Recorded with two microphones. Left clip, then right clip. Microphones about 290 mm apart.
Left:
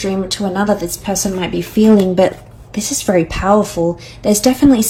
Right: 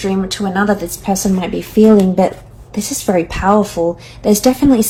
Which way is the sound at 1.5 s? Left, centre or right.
Right.